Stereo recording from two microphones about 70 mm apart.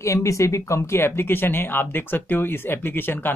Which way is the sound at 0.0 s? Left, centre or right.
Left.